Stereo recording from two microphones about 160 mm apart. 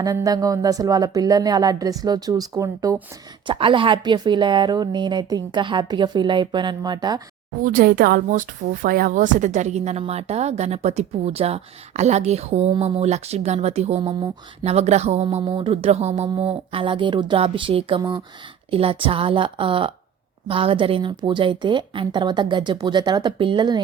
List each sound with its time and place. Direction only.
0.0 s a woman's voice: 20° right (ahead or behind)
3.4 s a woman's voice: 30° right (ahead or behind)
7.6 s a woman's voice: 60° right (ahead or behind); by 23.8 s 30° right (ahead or behind)